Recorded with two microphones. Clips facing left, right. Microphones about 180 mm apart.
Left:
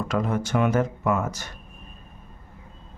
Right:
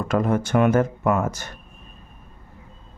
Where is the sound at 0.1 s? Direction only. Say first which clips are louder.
Right 5 dB; 50° right (ahead or behind).